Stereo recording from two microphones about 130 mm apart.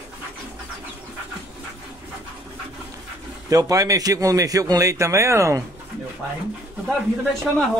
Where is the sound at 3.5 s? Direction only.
25° right (ahead or behind).